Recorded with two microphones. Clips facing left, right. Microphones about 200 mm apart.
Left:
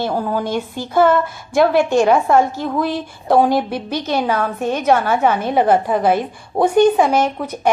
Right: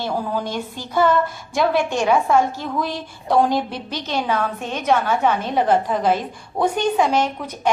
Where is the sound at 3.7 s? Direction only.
55° left (ahead or behind).